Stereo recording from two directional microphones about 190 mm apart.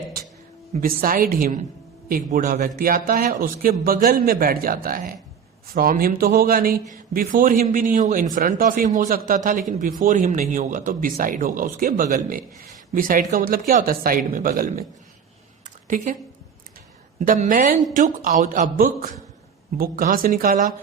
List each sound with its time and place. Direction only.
0.8 s speech: 45° right (ahead or behind)
15.6 s a sound: 45° right (ahead or behind)
17.2 s speech: 45° right (ahead or behind)